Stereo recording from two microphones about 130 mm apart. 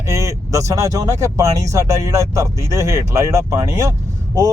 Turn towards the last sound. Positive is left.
turn(degrees=-25)  # may be behind; listen again after turning